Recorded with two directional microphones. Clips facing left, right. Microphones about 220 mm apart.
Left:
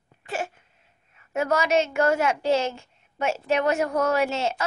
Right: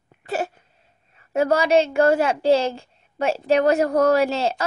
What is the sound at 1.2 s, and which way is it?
A woman's voice, 30° right (ahead or behind).